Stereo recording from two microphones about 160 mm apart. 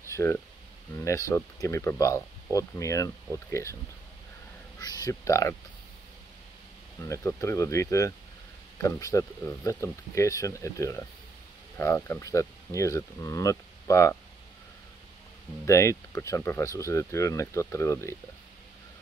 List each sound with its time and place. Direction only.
0.1 s speech: 15° left (ahead or behind)
4.7 s speech: 25° left (ahead or behind)
7.0 s speech: 20° left (ahead or behind)
15.6 s speech: 20° left (ahead or behind)